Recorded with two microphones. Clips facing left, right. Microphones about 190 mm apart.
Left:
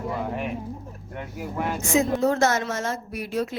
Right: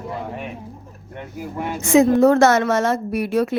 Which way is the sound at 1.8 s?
70° right (ahead or behind).